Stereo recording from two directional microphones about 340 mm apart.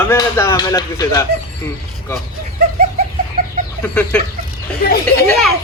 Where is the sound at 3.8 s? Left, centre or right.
Centre.